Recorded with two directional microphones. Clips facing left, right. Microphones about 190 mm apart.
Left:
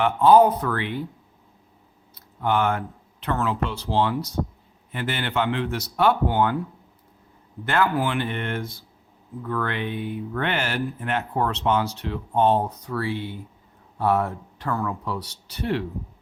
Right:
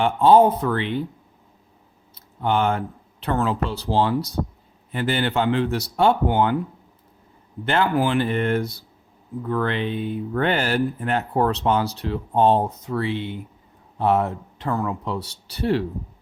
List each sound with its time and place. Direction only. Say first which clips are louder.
0.0 s speech: right 1 dB; 30° right (ahead or behind)
2.1 s speech: right 1 dB; 25° right (ahead or behind)
7.6 s speech: right 2 dB; 25° right (ahead or behind)
9.4 s speech: right 4 dB; 25° right (ahead or behind)